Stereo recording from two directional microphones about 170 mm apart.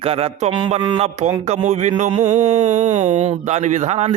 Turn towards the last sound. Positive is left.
turn(degrees=-40)  # may be behind; listen again after turning